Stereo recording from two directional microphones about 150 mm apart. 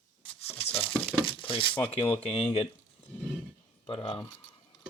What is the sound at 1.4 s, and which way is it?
Speech, 35° left (ahead or behind).